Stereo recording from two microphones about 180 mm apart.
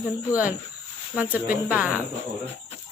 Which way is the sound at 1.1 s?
10° right (ahead or behind).